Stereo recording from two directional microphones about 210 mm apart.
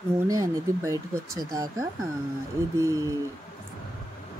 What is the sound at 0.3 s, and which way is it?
Speech, 15° right (ahead or behind).